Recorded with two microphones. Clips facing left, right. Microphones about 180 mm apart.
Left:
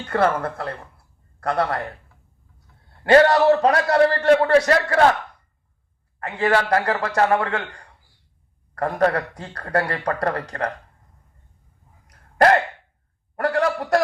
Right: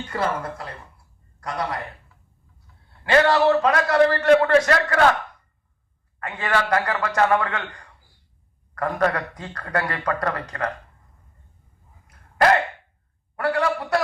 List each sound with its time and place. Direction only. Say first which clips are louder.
0.0 s speech: left 5 dB; 60° left (ahead or behind)
3.0 s a man's voice: left 3 dB; 40° left (ahead or behind)
6.1 s a man's voice: left 4 dB; 35° left (ahead or behind)
12.0 s gasp: left 2 dB; 45° left (ahead or behind)
13.3 s a sound: left 2 dB; 45° left (ahead or behind)